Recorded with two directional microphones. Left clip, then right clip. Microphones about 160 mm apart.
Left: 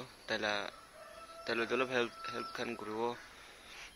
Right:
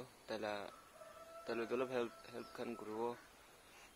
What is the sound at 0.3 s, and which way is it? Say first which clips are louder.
Speech: left 8 dB; centre (ahead or behind).